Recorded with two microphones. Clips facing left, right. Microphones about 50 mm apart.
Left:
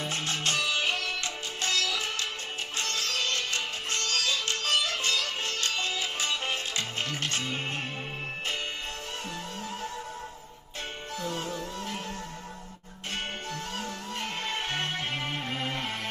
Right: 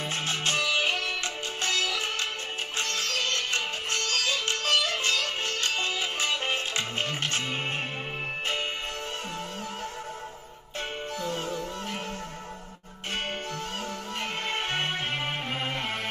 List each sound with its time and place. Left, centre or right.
0.1 s music: right
11.2 s music: right
14.2 s music: right